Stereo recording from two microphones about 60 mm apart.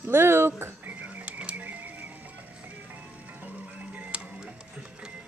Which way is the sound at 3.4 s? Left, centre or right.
Right.